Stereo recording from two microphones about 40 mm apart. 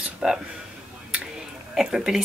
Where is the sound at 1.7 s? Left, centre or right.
Centre.